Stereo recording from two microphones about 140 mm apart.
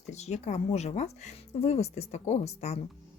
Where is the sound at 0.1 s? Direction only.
55° left (ahead or behind).